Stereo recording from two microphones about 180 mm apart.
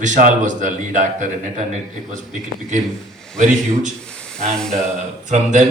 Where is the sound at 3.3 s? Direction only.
40° right (ahead or behind).